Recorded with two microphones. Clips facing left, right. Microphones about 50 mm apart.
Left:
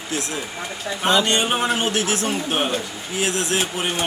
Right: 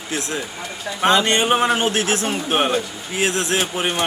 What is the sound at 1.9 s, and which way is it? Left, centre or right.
Speech, right.